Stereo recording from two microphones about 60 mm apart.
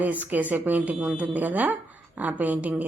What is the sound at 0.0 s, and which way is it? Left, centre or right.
Speech, right.